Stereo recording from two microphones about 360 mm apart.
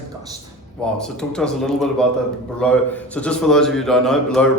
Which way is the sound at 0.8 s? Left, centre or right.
Centre.